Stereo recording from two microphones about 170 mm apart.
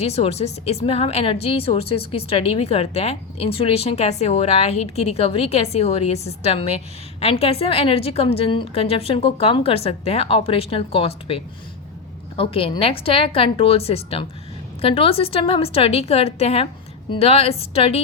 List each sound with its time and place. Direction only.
0.0 s a woman's voice: 35° left (ahead or behind)